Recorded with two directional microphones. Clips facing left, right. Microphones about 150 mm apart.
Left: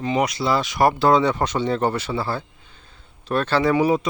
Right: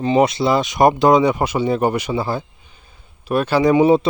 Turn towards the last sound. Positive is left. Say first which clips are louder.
# right 5 dB
turn(degrees=-25)  # may be behind; listen again after turning